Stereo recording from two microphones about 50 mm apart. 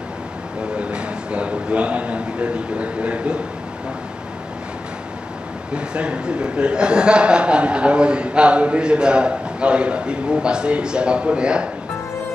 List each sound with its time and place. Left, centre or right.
0.7 s a man's voice: right
5.8 s a man's voice: right